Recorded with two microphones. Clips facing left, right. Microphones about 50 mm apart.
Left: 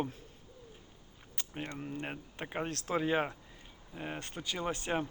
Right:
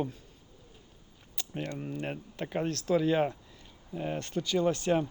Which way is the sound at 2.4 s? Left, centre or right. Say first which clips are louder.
Right 5 dB; left.